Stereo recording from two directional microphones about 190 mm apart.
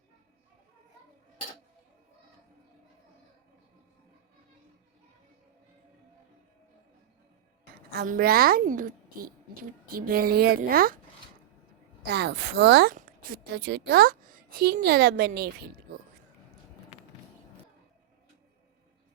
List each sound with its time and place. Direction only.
7.9 s a woman's voice: 50° right (ahead or behind)
12.0 s a woman's voice: 60° right (ahead or behind)